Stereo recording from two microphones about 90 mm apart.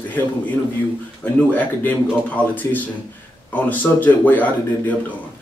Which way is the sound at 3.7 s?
20° left (ahead or behind).